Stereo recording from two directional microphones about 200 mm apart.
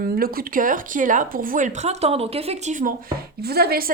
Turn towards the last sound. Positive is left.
turn(degrees=-50)  # may be behind; listen again after turning